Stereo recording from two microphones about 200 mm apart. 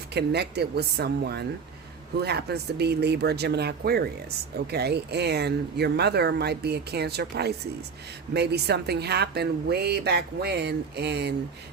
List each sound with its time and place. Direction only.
0.1 s speech: 55° right (ahead or behind)